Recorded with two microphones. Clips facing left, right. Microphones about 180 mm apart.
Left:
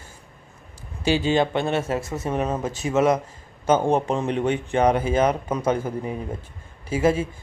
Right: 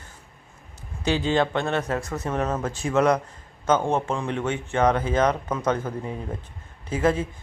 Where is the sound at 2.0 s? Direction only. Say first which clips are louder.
Left 2 dB; 25° left (ahead or behind).